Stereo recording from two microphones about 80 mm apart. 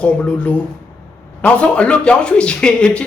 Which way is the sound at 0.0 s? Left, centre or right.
Centre.